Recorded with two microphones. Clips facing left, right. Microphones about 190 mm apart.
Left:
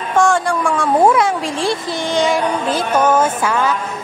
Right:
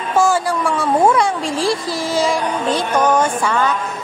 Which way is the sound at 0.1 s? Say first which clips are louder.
Left 1 dB; 5° right (ahead or behind).